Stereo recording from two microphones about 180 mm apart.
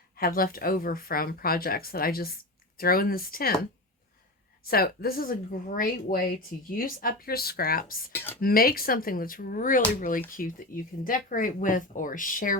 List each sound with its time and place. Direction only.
0.2 s speech: 55° left (ahead or behind)
4.6 s speech: 55° left (ahead or behind)